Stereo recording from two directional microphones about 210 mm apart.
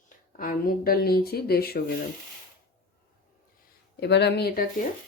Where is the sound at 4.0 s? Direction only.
55° left (ahead or behind).